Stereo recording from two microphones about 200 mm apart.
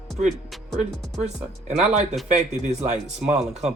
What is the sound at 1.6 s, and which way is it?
Speech, 35° right (ahead or behind).